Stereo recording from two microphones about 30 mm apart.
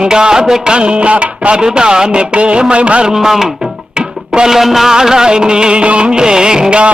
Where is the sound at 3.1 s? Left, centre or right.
Centre.